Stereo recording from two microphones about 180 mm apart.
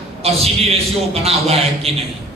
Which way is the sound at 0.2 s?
35° right (ahead or behind).